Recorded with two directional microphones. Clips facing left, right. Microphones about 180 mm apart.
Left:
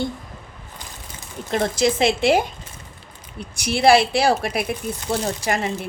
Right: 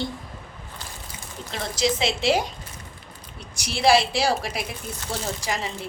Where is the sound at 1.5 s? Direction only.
55° left (ahead or behind).